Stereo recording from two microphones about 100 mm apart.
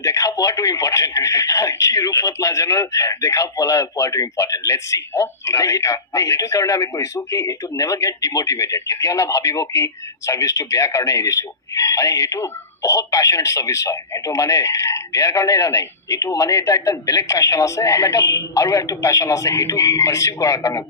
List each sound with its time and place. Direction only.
0.0 s speech: 35° left (ahead or behind)